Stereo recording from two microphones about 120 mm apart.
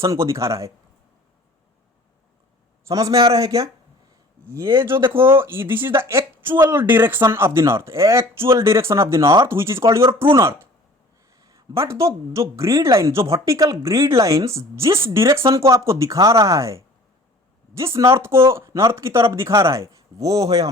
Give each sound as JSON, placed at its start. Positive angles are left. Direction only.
{"t": 0.0, "sound": "speech", "side_deg": -25}
{"t": 2.8, "sound": "speech", "side_deg": -30}